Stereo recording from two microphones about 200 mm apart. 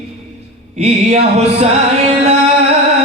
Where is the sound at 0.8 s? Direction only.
30° right (ahead or behind).